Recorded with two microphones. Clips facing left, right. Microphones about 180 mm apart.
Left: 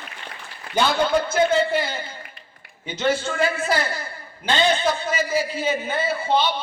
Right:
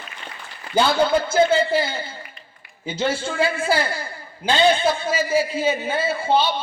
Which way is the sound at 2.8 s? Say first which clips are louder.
Left 1 dB; 30° right (ahead or behind).